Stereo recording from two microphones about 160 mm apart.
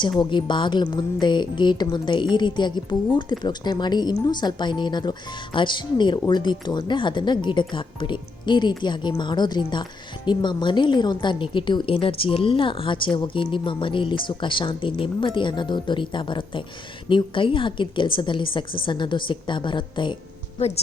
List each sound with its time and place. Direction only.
0.2 s a woman's voice: 30° left (ahead or behind)
20.6 s a woman's voice: 40° left (ahead or behind)